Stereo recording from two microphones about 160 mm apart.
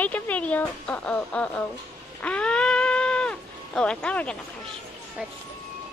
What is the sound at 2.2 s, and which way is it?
Sheep, 5° left (ahead or behind).